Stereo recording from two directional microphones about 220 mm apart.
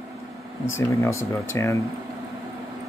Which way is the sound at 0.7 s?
10° left (ahead or behind).